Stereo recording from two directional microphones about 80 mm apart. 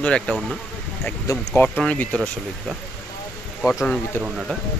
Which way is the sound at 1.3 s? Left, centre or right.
Left.